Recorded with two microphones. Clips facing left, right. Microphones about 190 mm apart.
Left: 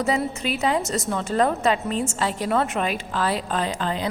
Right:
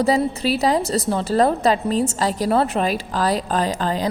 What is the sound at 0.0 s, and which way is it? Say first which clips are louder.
A woman's voice: right 5 dB; 35° right (ahead or behind).